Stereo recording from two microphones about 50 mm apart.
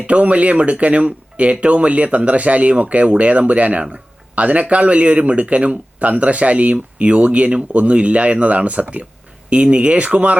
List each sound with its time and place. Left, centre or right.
0.1 s speech: right